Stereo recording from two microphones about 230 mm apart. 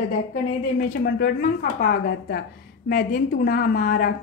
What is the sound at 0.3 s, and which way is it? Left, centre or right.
A woman's voice, left.